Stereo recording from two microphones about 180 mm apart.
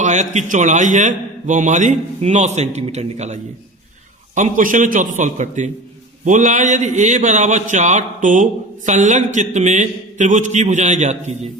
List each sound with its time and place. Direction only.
0.0 s a man's voice: 40° right (ahead or behind)